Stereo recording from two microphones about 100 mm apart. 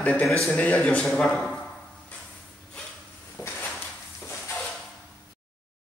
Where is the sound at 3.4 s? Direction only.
30° left (ahead or behind).